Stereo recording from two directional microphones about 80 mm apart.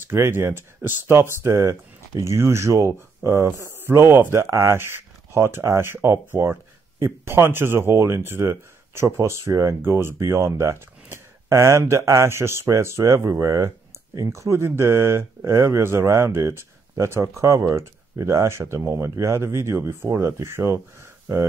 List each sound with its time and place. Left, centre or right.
0.1 s speech: right
9.8 s speech: right